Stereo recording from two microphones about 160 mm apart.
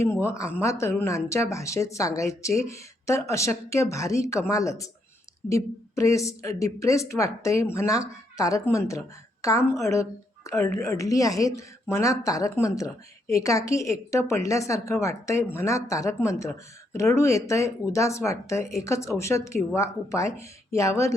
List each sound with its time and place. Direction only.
0.0 s a woman's voice: 15° left (ahead or behind)